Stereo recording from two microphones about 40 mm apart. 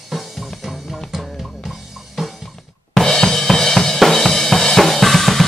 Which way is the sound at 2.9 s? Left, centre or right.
Centre.